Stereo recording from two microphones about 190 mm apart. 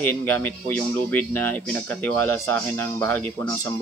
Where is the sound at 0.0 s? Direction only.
10° left (ahead or behind).